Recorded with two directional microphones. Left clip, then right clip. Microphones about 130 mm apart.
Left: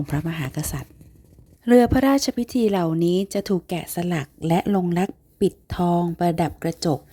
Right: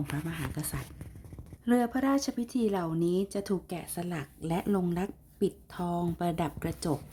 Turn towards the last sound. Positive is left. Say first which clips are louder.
# left 9 dB
turn(degrees=50)  # may be behind; listen again after turning